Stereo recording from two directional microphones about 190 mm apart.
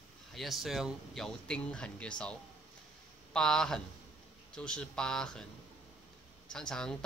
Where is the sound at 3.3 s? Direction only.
5° left (ahead or behind).